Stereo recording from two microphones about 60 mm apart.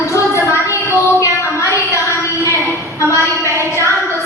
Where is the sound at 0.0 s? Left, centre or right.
Left.